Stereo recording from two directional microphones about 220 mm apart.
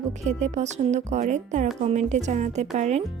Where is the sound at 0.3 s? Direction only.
30° right (ahead or behind).